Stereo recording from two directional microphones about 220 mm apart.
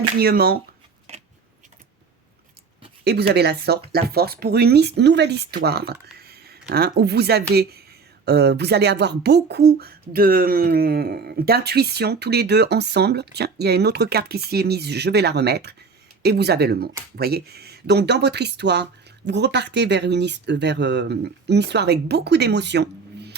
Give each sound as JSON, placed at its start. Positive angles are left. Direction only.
{"t": 0.2, "sound": "speech", "side_deg": -45}
{"t": 3.0, "sound": "speech", "side_deg": -45}